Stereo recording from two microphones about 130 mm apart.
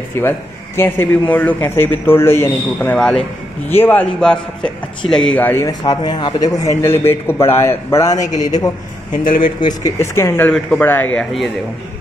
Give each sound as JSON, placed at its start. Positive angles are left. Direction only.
{"t": 0.2, "sound": "a man's voice", "side_deg": 20}
{"t": 5.7, "sound": "speech", "side_deg": 30}
{"t": 9.9, "sound": "a man's voice", "side_deg": 20}